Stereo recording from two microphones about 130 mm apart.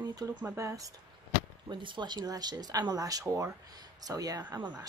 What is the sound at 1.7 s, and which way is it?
Speech, 35° right (ahead or behind).